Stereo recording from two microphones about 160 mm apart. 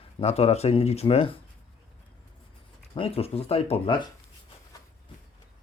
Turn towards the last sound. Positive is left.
turn(degrees=35)  # may be behind; listen again after turning